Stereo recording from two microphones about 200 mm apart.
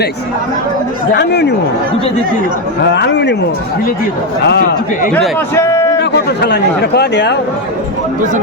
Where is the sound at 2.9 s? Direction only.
60° left (ahead or behind).